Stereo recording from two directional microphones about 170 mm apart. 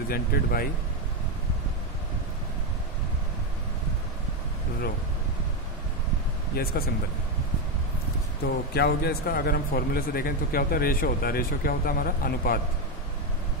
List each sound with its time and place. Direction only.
0.1 s speech: 60° left (ahead or behind)
6.5 s speech: 65° left (ahead or behind)
8.7 s speech: 70° left (ahead or behind)